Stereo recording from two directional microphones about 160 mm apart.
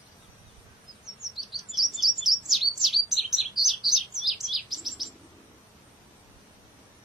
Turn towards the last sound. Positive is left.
turn(degrees=0)  # may be behind; listen again after turning